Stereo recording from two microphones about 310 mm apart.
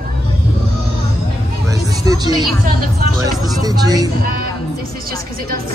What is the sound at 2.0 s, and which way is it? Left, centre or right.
A man's voice, centre.